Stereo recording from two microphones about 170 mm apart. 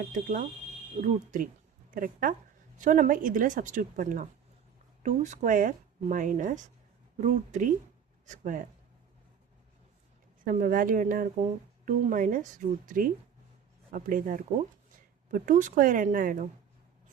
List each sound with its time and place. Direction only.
0.0 s a woman's voice: 50° right (ahead or behind)
10.4 s a woman's voice: 50° right (ahead or behind)